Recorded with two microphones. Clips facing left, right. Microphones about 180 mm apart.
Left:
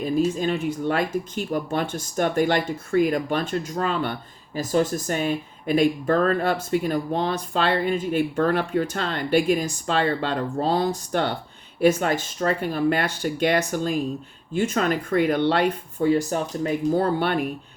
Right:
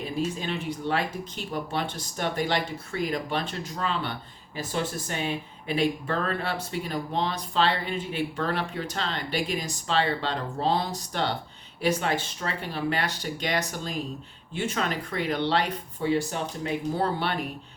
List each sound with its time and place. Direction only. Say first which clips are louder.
0.0 s speech: left 8 dB; 45° left (ahead or behind)